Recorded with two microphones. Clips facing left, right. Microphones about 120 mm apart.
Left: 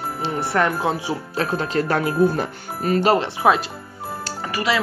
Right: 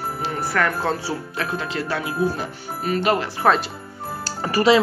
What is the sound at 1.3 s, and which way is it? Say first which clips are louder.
Speech: left 8 dB; 35° left (ahead or behind).